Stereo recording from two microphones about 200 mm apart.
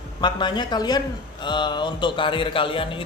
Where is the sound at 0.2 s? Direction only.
20° left (ahead or behind).